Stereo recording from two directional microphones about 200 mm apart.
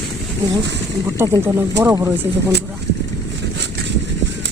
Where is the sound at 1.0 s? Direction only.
15° right (ahead or behind).